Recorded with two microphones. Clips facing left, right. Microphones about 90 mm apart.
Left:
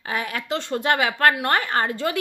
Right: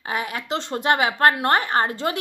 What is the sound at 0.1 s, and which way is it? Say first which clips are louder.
Speech: even; 25° right (ahead or behind).